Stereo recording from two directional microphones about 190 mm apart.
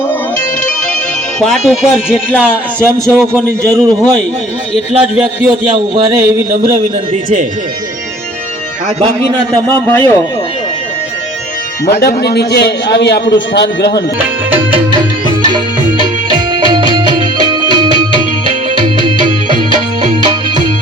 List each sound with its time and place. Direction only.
1.4 s a man's voice: centre (ahead or behind); by 4.1 s 15° right (ahead or behind)
5.1 s a man's voice: centre (ahead or behind)
5.7 s a man's voice: 25° right (ahead or behind)
9.7 s a man's voice: 10° left (ahead or behind)
11.9 s a man's voice: 55° left (ahead or behind)
16.5 s music: 25° right (ahead or behind)
20.0 s music: 25° right (ahead or behind)